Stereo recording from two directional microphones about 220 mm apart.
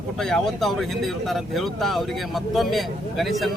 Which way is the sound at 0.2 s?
Centre (ahead or behind).